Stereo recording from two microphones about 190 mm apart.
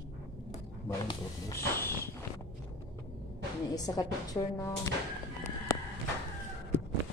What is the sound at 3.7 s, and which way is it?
Speech, 20° left (ahead or behind).